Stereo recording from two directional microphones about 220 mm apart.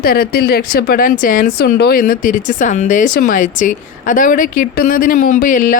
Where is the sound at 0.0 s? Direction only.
45° left (ahead or behind).